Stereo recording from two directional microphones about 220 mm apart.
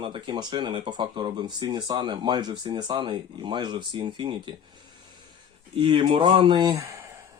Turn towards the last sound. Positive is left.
turn(degrees=-15)  # may be behind; listen again after turning